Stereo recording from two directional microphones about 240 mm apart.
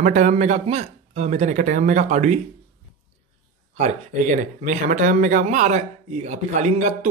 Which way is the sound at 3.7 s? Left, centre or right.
Right.